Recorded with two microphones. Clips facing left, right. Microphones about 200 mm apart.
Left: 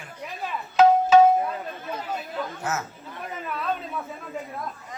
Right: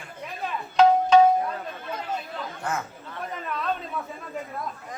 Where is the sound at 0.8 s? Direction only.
5° left (ahead or behind).